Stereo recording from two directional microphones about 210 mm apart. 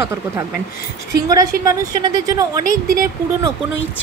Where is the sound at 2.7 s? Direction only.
40° right (ahead or behind).